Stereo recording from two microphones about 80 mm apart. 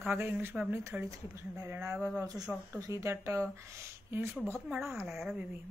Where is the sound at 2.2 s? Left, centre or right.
Right.